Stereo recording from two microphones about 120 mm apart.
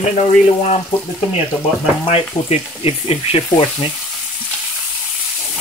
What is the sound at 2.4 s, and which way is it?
Speech, 60° left (ahead or behind).